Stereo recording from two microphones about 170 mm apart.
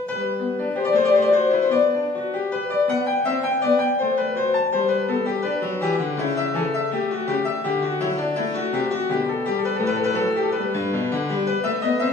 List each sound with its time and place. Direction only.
0.8 s music: 15° left (ahead or behind)